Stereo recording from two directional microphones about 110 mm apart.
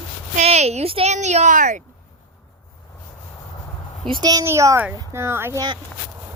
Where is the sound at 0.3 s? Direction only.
90° right.